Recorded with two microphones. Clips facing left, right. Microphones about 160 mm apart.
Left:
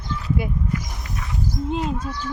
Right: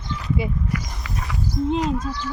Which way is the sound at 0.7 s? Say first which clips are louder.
Even; 90° right.